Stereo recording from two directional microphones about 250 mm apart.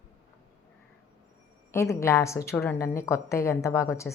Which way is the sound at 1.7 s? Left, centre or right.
Centre.